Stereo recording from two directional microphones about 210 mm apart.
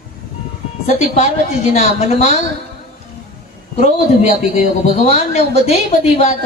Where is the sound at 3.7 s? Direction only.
35° left (ahead or behind).